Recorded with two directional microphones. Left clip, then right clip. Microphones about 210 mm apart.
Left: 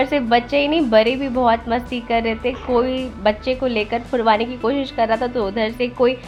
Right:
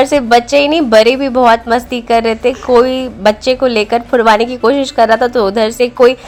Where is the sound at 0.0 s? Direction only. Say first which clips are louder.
Right 8 dB; 25° right (ahead or behind).